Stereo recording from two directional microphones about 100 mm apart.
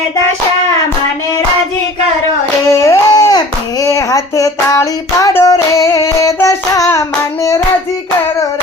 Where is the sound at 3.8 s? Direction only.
30° left (ahead or behind).